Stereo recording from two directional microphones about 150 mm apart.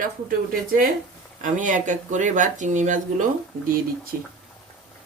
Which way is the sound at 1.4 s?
60° right (ahead or behind).